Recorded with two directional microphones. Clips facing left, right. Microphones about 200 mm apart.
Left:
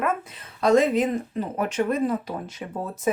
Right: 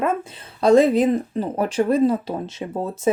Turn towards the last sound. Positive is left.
turn(degrees=-25)  # may be behind; listen again after turning